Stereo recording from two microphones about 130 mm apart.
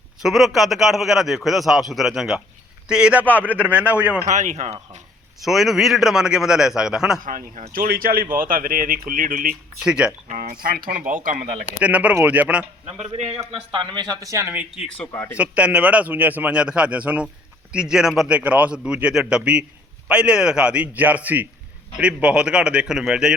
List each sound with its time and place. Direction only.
0.2 s a man's voice: centre (ahead or behind)
4.3 s speech: 65° right (ahead or behind)
5.4 s a man's voice: centre (ahead or behind)
7.3 s speech: 90° right
9.8 s a man's voice: 5° right (ahead or behind)
10.2 s speech: 90° right
11.8 s a man's voice: 10° right (ahead or behind)
12.9 s a man's voice: 50° right (ahead or behind)
14.2 s a man's voice: 25° right (ahead or behind)
15.1 s speech: 20° left (ahead or behind)
15.4 s a man's voice: 10° right (ahead or behind)